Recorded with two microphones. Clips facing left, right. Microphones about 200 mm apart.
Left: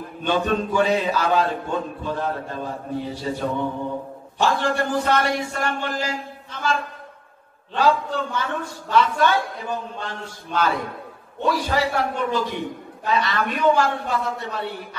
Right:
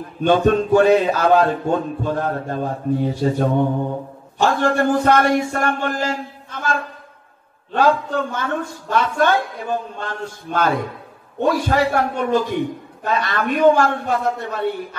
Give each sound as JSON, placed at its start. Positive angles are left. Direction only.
{"t": 0.2, "sound": "a man's voice", "side_deg": -50}